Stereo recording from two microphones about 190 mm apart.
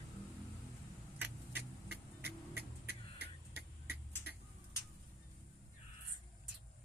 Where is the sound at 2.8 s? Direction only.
55° left (ahead or behind).